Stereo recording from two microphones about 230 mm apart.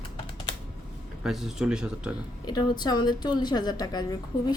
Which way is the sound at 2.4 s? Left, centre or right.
Centre.